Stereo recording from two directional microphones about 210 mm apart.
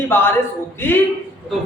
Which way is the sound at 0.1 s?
10° left (ahead or behind).